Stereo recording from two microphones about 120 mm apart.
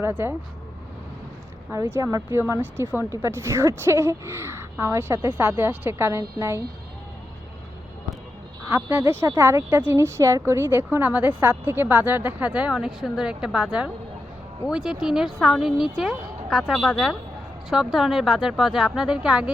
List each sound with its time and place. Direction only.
0.0 s speech: 20° right (ahead or behind)
1.7 s speech: 25° right (ahead or behind)
8.7 s a woman's voice: 15° right (ahead or behind)